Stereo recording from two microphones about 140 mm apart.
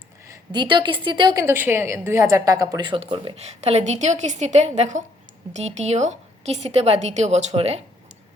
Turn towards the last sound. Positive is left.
turn(degrees=-50)  # may be behind; listen again after turning